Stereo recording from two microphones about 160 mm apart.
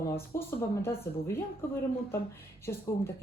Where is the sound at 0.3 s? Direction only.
15° left (ahead or behind).